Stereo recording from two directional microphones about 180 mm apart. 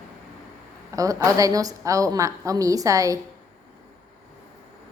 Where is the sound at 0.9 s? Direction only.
20° right (ahead or behind).